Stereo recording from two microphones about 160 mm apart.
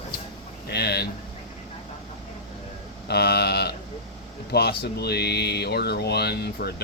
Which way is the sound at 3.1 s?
90° left.